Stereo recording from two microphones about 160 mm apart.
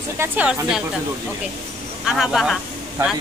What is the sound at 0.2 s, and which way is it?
Speech, 10° right (ahead or behind).